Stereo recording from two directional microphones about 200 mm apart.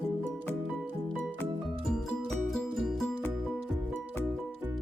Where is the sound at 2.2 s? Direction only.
Centre (ahead or behind).